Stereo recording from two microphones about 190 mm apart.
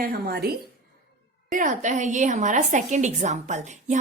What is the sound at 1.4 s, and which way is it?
A woman's voice, 40° right (ahead or behind).